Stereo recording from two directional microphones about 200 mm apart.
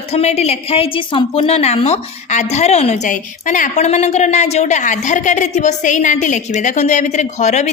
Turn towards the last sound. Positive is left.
turn(degrees=35)  # may be behind; listen again after turning